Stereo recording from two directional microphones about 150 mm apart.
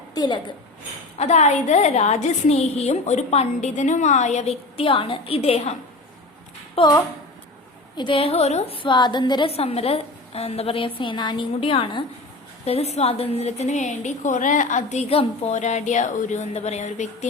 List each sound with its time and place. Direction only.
0.1 s a woman's voice: 25° left (ahead or behind)
1.2 s a woman's voice: 50° left (ahead or behind)
6.7 s a woman's voice: 30° left (ahead or behind); by 17.2 s 50° left (ahead or behind)